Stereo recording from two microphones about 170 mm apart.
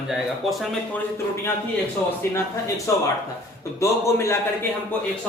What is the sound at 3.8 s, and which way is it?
Speech, 15° left (ahead or behind).